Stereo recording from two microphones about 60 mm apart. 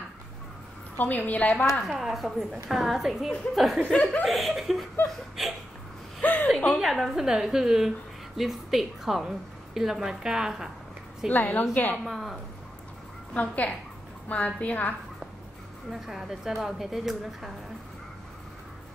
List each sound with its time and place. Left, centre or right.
0.9 s a woman's voice: left
1.9 s a woman's voice: centre
3.8 s a woman's voice: left
4.2 s a woman's voice: centre
6.2 s a sound: left
6.8 s a woman's voice: centre
11.2 s a woman's voice: left
12.0 s a woman's voice: centre
13.3 s a woman's voice: left
15.9 s a woman's voice: centre